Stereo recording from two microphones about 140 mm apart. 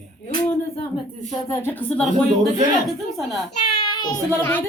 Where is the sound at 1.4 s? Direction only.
20° left (ahead or behind).